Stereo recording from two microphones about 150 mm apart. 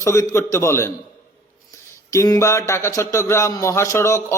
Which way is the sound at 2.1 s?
20° left (ahead or behind).